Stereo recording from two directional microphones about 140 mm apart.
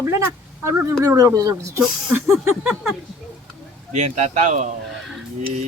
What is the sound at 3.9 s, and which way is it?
Speech, 55° right (ahead or behind).